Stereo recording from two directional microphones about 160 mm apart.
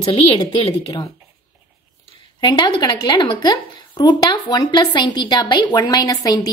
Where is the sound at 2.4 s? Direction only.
30° left (ahead or behind).